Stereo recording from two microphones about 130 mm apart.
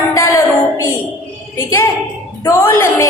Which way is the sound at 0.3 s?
20° left (ahead or behind).